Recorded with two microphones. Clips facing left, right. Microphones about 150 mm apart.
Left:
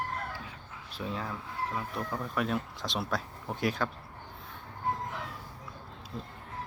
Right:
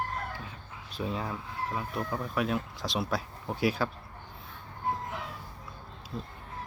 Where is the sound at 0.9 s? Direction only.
15° right (ahead or behind).